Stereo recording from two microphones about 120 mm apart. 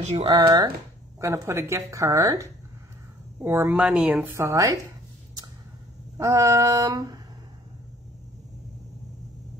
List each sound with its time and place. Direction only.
0.3 s speech: 40° right (ahead or behind)
1.2 s a woman's voice: 25° right (ahead or behind)
6.1 s a woman's voice: 25° right (ahead or behind)